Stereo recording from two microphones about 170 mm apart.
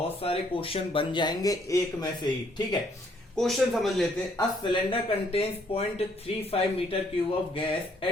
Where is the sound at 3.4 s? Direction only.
Centre (ahead or behind).